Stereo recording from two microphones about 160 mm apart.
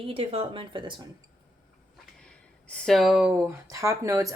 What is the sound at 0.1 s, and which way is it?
Speech, 40° right (ahead or behind).